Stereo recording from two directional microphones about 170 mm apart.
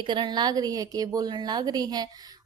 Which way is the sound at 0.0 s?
25° right (ahead or behind).